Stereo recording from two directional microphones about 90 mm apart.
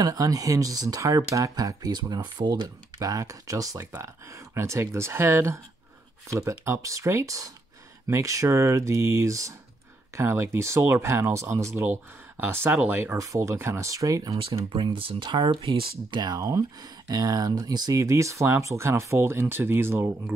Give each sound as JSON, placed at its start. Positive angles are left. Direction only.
{"t": 0.0, "sound": "speech", "side_deg": -40}
{"t": 3.0, "sound": "speech", "side_deg": -40}
{"t": 13.2, "sound": "speech", "side_deg": -35}
{"t": 14.7, "sound": "speech", "side_deg": -75}
{"t": 15.2, "sound": "speech", "side_deg": -60}